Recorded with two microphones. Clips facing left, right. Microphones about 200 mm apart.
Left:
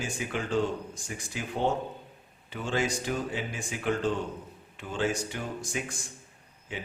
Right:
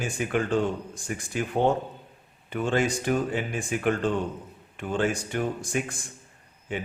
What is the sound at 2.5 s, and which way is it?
A man's voice, 55° right (ahead or behind).